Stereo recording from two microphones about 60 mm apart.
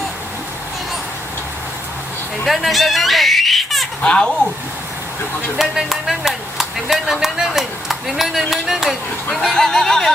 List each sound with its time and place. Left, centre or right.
2.4 s speech: centre
4.0 s speech: centre
5.5 s speech: centre
9.6 s a sound: centre